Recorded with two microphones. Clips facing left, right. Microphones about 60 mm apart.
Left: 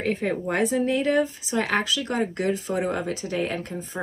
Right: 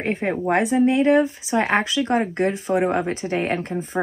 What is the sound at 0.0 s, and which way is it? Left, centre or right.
Speech, right.